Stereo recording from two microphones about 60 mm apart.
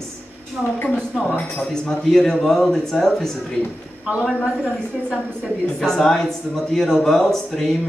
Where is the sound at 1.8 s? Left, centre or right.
Centre.